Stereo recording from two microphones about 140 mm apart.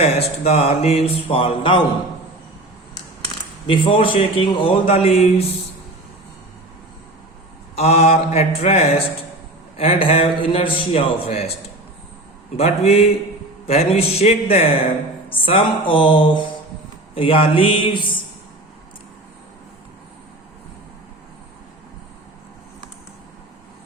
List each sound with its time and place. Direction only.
0.0 s speech: 50° left (ahead or behind)
3.7 s speech: 40° left (ahead or behind)
7.8 s speech: 50° left (ahead or behind)
12.5 s speech: 45° left (ahead or behind)
15.4 s a sound: 40° left (ahead or behind)